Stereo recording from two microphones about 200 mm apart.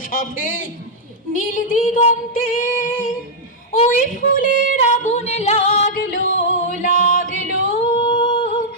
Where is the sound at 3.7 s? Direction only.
40° left (ahead or behind).